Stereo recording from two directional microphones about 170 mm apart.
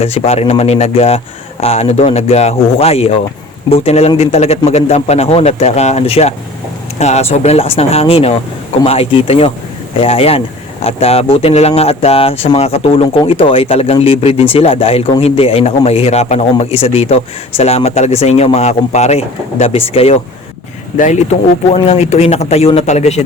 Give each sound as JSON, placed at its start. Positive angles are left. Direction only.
{"t": 0.0, "sound": "speech", "side_deg": 35}